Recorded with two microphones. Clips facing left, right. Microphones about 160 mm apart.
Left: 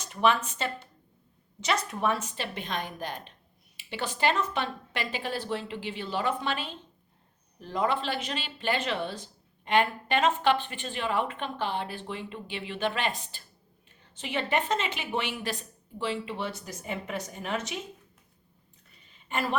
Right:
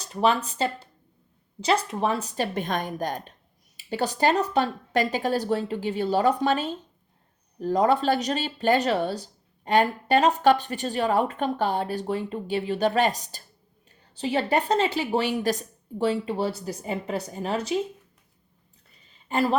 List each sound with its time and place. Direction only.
0.0 s a woman's voice: 35° right (ahead or behind)
19.3 s speech: 35° right (ahead or behind)